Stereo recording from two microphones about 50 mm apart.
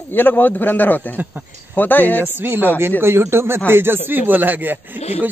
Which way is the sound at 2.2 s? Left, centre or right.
Right.